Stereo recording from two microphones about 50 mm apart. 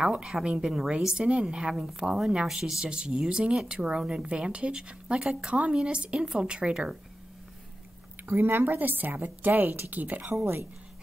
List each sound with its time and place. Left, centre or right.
0.0 s speech: centre
8.3 s a woman's voice: right
9.8 s a woman's voice: right
10.4 s speech: right